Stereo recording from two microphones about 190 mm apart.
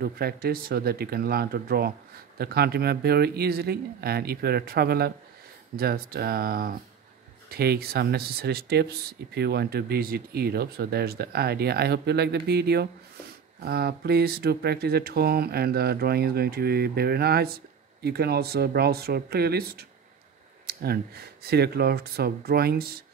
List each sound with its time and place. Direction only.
0.0 s speech: 55° right (ahead or behind)